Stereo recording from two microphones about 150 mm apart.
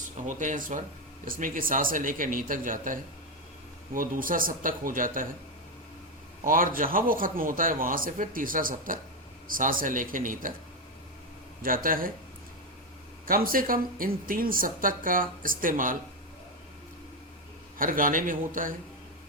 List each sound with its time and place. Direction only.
0.3 s a man's voice: 55° right (ahead or behind)
6.4 s a man's voice: 65° right (ahead or behind)
11.6 s speech: 70° right (ahead or behind)
13.2 s speech: 70° right (ahead or behind)
17.7 s a man's voice: 65° right (ahead or behind)